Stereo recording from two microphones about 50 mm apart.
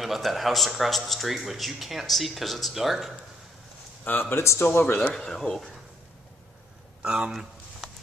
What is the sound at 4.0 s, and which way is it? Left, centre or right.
Speech, left.